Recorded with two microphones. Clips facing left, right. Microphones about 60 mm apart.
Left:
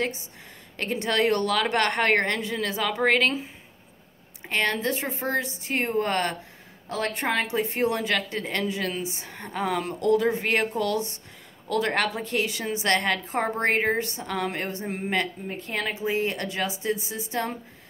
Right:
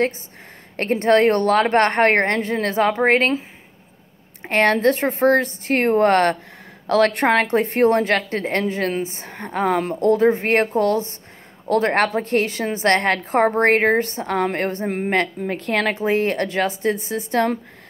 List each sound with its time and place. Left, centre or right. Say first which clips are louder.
0.7 s a woman's voice: right 9 dB; right
4.4 s a woman's voice: right 9 dB; right
6.9 s a woman's voice: right 11 dB; right
15.4 s a woman's voice: right 9 dB; right